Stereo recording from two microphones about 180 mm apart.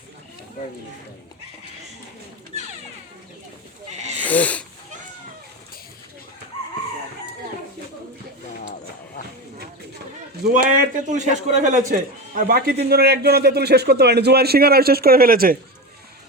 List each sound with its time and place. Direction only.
3.8 s wild animals: 40° right (ahead or behind)
4.2 s wheeze: 10° left (ahead or behind)
10.4 s a man's voice: 50° right (ahead or behind)